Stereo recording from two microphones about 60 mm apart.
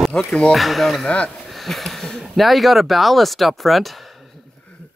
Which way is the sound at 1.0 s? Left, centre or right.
Left.